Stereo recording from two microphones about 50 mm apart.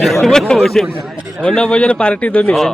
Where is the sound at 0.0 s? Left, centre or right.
Centre.